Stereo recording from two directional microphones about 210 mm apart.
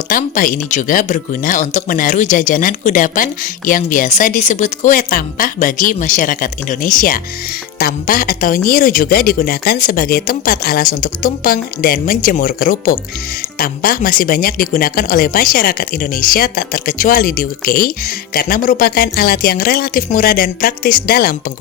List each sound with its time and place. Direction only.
0.1 s speech: 40° left (ahead or behind)